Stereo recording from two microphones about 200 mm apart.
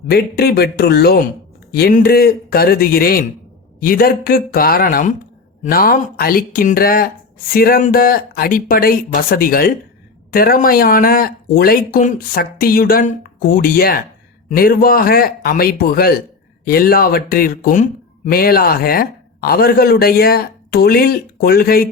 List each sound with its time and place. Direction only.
0.1 s speech: 50° left (ahead or behind)